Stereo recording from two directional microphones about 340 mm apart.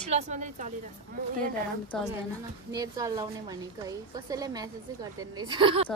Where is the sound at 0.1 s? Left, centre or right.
Right.